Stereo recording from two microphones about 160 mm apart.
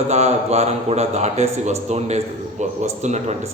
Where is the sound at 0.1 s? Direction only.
45° right (ahead or behind).